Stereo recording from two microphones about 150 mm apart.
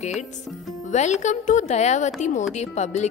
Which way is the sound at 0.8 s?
50° left (ahead or behind).